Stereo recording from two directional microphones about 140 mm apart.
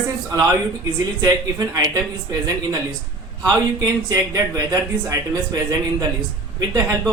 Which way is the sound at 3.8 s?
25° right (ahead or behind).